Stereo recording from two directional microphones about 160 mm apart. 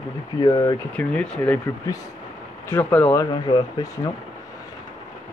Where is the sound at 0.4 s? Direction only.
25° left (ahead or behind).